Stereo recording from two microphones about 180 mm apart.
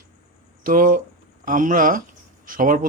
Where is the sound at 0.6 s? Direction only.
50° right (ahead or behind).